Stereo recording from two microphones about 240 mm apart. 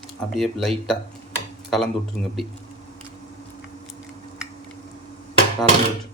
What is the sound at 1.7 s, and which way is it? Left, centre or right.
Speech, centre.